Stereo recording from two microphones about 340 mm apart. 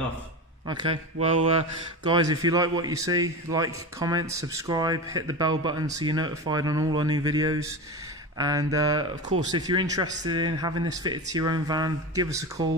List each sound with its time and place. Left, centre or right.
1.2 s a man's voice: centre